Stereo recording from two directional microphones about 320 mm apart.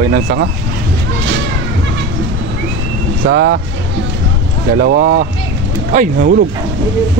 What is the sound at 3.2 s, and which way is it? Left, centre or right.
Speech, right.